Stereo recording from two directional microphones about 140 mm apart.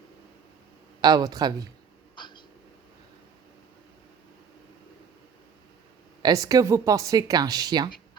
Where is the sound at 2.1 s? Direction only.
35° left (ahead or behind).